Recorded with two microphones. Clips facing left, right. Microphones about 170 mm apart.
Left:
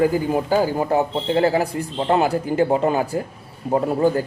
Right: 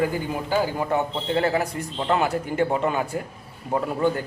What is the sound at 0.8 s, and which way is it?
A man's voice, 30° left (ahead or behind).